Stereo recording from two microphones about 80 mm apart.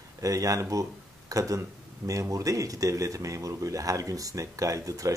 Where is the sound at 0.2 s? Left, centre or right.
Right.